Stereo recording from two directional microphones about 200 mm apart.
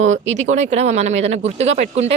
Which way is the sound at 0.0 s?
35° right (ahead or behind).